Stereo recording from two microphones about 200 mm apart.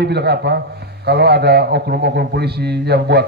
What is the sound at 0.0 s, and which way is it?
A man's voice, 55° right (ahead or behind).